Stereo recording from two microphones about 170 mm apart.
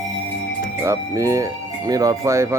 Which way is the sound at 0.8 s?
15° right (ahead or behind).